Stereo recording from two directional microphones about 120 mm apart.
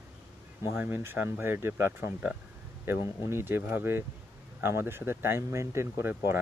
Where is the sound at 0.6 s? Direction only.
20° right (ahead or behind).